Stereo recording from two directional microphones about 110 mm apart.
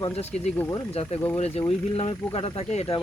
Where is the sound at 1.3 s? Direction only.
70° left (ahead or behind).